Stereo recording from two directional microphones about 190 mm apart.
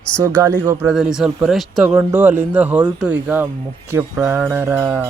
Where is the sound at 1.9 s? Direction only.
15° right (ahead or behind).